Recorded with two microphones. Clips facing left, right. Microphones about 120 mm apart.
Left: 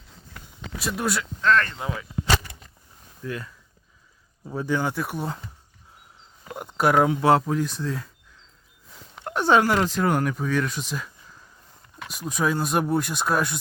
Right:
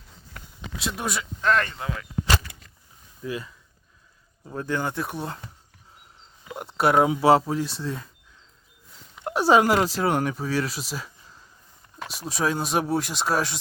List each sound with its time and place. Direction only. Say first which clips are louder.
0.9 s speech: left 5 dB; centre (ahead or behind)
1.4 s speech: left 1 dB; 15° right (ahead or behind)
3.2 s speech: right 1 dB; 10° right (ahead or behind)
4.4 s speech: left 2 dB; 10° left (ahead or behind)
6.5 s speech: even; centre (ahead or behind)
9.2 s speech: right 1 dB; 10° right (ahead or behind)
12.1 s speech: left 1 dB; centre (ahead or behind)